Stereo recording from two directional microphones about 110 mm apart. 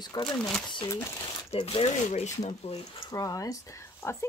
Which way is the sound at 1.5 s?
55° left (ahead or behind).